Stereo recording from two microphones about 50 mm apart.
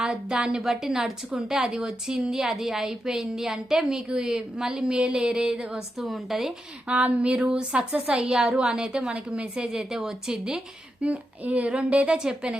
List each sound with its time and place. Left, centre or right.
0.0 s a woman's voice: centre
6.0 s speech: centre
6.8 s a woman's voice: right
9.7 s a woman's voice: centre
11.0 s a woman's voice: right
12.1 s a woman's voice: centre